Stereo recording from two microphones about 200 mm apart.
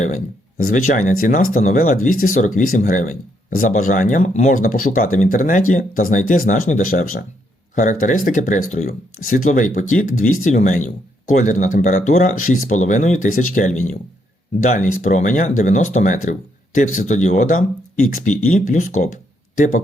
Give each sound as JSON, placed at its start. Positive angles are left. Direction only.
{"t": 0.7, "sound": "speech", "side_deg": 40}
{"t": 2.0, "sound": "speech", "side_deg": 90}
{"t": 2.2, "sound": "speech", "side_deg": 40}